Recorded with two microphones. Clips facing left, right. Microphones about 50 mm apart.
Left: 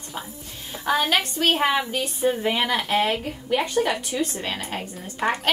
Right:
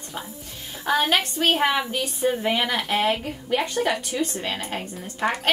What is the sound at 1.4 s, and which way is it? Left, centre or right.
A woman's voice, centre.